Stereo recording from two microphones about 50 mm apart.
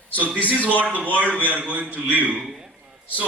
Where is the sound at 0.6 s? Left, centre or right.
Left.